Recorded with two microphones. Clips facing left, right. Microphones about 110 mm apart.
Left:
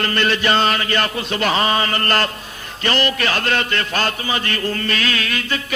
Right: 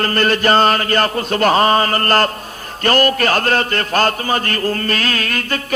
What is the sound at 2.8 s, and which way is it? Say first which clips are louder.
Mantra: right 5 dB; 45° right (ahead or behind).